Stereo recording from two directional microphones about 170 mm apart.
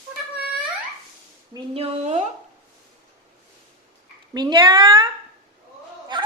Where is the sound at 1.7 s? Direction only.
40° right (ahead or behind).